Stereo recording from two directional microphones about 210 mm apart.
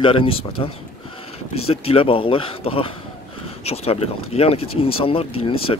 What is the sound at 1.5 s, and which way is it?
Speech, 30° left (ahead or behind).